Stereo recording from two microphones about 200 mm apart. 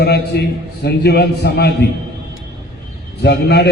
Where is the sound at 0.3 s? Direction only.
50° left (ahead or behind).